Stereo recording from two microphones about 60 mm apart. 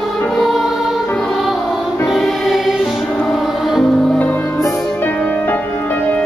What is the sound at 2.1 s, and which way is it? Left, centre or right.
Music, centre.